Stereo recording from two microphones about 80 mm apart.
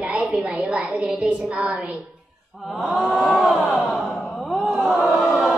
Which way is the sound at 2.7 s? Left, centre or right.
Centre.